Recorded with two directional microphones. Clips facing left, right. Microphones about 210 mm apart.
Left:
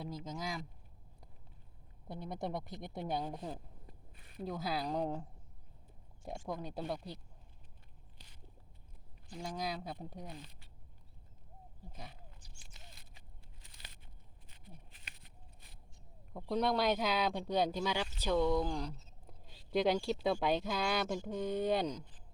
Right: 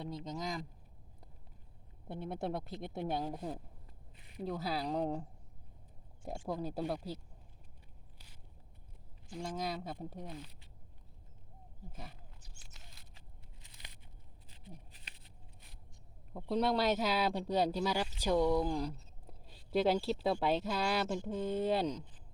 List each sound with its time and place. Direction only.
0.0 s speech: centre (ahead or behind)
2.3 s speech: centre (ahead or behind)
6.7 s speech: 5° right (ahead or behind)
9.3 s speech: centre (ahead or behind)
11.9 s speech: 5° right (ahead or behind)
14.5 s a sound: 35° right (ahead or behind)
16.3 s speech: 5° right (ahead or behind)